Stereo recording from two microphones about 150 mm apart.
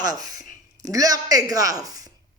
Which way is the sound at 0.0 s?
25° right (ahead or behind).